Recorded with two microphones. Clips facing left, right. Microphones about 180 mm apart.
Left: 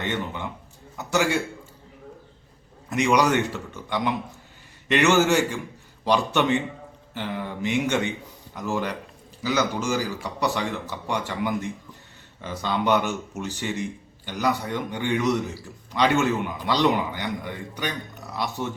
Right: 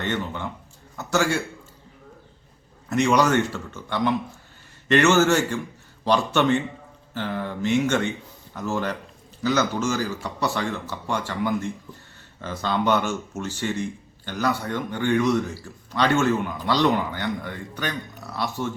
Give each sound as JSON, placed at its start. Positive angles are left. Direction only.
{"t": 0.0, "sound": "speech", "side_deg": 15}
{"t": 2.9, "sound": "speech", "side_deg": 15}